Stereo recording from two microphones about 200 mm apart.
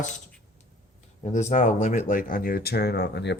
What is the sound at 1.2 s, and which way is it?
Speech, 35° left (ahead or behind).